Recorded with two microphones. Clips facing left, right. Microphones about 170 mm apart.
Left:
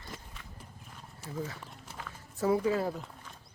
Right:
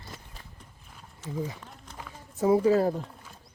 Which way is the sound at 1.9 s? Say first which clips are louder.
Right 5 dB; 15° right (ahead or behind).